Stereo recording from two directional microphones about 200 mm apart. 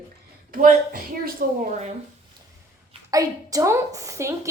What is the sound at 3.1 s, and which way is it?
A woman's voice, 15° right (ahead or behind).